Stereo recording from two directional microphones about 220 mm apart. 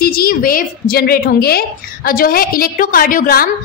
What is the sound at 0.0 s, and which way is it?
A woman's voice, 40° left (ahead or behind).